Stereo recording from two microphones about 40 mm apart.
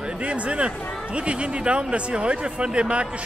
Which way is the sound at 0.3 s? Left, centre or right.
Right.